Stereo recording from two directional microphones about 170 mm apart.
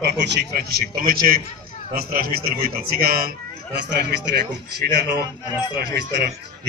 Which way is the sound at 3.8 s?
80° right.